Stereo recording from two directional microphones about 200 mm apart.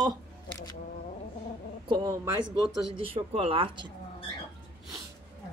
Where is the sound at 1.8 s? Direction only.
15° right (ahead or behind).